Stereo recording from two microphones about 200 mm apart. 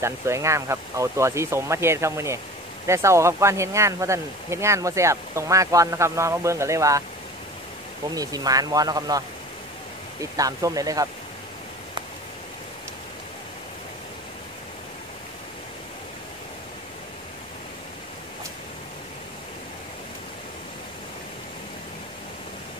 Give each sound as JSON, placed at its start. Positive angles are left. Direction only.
{"t": 0.0, "sound": "speech", "side_deg": -15}
{"t": 8.1, "sound": "speech", "side_deg": -20}
{"t": 10.3, "sound": "speech", "side_deg": -15}